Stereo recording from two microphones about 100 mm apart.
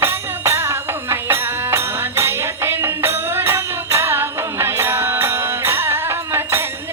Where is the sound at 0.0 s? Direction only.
25° right (ahead or behind).